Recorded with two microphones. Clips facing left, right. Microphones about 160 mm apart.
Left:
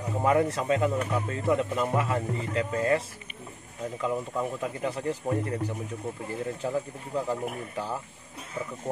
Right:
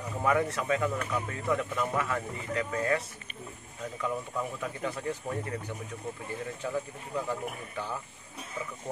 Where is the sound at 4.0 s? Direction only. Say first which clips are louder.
Left 4 dB; 25° left (ahead or behind).